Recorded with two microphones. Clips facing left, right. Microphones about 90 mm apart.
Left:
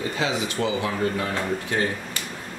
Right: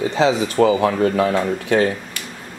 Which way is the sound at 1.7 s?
90° right.